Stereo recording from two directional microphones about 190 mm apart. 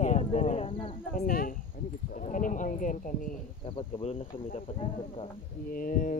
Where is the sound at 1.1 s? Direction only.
50° left (ahead or behind).